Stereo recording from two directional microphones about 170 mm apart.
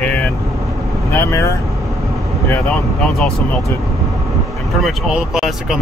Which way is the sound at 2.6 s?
Centre (ahead or behind).